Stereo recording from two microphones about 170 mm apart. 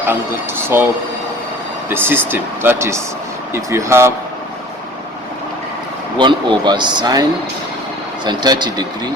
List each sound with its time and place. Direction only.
0.1 s speech: 10° right (ahead or behind)
1.9 s speech: 15° right (ahead or behind)
6.1 s speech: 30° right (ahead or behind)